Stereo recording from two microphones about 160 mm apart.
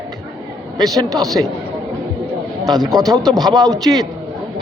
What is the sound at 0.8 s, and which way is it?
Speech, 25° right (ahead or behind).